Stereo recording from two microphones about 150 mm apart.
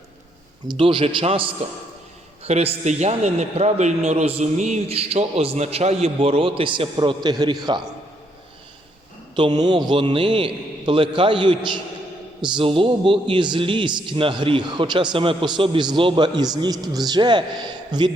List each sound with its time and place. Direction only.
0.7 s a man's voice: 35° right (ahead or behind)
9.3 s a man's voice: 30° right (ahead or behind)